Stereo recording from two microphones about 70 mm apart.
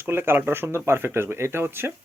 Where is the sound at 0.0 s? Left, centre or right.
Right.